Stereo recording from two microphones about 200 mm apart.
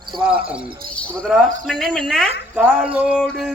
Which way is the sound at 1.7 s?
Centre (ahead or behind).